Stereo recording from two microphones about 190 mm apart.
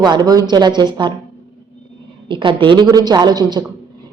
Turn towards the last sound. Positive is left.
turn(degrees=-20)  # may be behind; listen again after turning